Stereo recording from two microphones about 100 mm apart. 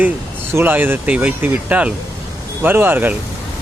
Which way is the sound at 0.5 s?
20° right (ahead or behind).